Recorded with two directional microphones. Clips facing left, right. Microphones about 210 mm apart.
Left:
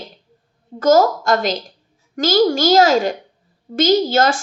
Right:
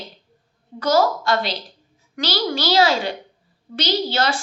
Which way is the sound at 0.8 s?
45° left (ahead or behind).